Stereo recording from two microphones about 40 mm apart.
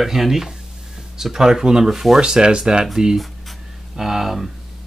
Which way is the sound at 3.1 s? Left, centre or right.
Centre.